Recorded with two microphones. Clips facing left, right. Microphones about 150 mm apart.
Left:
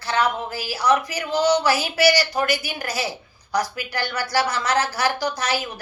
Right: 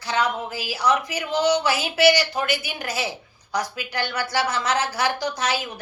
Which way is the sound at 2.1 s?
40° left (ahead or behind).